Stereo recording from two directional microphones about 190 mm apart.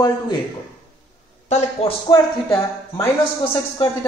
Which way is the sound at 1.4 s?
35° left (ahead or behind).